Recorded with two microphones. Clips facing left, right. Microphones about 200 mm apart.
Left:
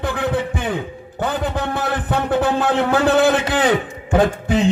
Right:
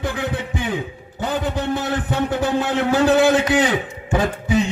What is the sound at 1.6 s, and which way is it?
A man's voice, 60° left (ahead or behind).